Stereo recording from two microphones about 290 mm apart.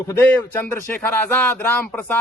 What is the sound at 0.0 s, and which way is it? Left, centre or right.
Speech, centre.